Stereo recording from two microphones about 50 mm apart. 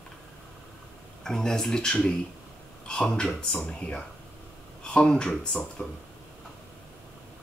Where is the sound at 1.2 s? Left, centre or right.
Centre.